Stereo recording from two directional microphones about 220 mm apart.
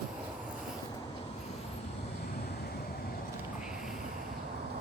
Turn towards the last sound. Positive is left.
turn(degrees=-5)  # may be behind; listen again after turning